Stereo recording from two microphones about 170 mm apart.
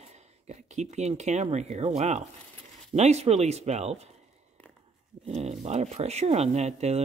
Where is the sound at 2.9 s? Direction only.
40° right (ahead or behind).